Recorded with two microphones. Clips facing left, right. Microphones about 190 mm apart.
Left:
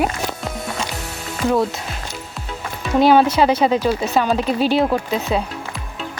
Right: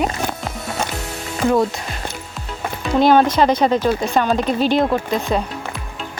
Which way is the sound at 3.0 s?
10° left (ahead or behind).